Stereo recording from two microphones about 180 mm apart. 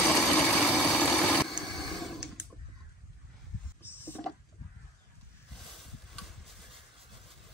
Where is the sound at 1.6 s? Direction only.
Centre (ahead or behind).